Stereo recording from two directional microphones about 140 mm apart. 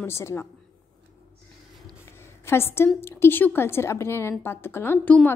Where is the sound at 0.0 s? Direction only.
20° left (ahead or behind).